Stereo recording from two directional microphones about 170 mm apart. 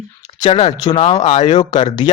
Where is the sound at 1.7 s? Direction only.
25° left (ahead or behind).